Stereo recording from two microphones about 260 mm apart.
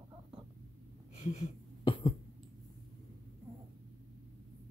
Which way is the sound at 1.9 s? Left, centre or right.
Left.